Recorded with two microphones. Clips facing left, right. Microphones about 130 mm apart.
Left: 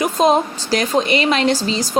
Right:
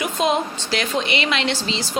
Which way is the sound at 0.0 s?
40° left (ahead or behind).